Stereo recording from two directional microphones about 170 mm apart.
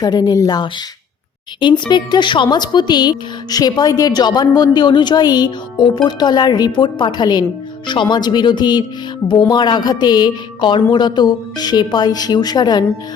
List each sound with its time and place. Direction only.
0.0 s speech: 25° left (ahead or behind)
1.9 s speech: 25° left (ahead or behind)